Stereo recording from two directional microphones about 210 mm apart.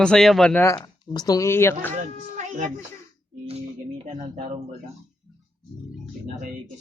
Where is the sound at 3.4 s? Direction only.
30° right (ahead or behind).